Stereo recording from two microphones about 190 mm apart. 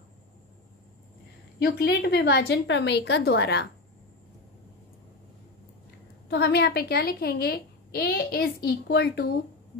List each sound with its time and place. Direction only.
1.6 s a woman's voice: 60° left (ahead or behind)
6.2 s a woman's voice: 60° left (ahead or behind)